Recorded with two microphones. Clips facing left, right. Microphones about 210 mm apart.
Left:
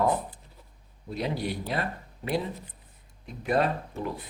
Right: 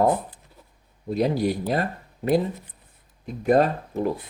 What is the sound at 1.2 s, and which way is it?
Speech, 40° right (ahead or behind).